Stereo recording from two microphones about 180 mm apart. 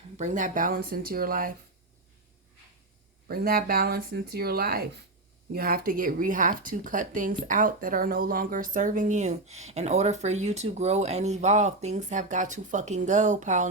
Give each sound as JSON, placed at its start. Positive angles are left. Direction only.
{"t": 0.2, "sound": "speech", "side_deg": -45}
{"t": 3.2, "sound": "speech", "side_deg": -55}